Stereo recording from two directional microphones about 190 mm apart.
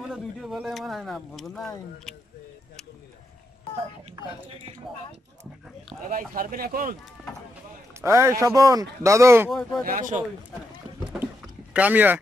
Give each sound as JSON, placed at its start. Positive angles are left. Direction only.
{"t": 0.1, "sound": "speech", "side_deg": 0}
{"t": 6.0, "sound": "speech", "side_deg": -45}
{"t": 8.0, "sound": "speech", "side_deg": -15}
{"t": 9.5, "sound": "speech", "side_deg": 0}
{"t": 9.8, "sound": "speech", "side_deg": -45}
{"t": 11.7, "sound": "speech", "side_deg": -10}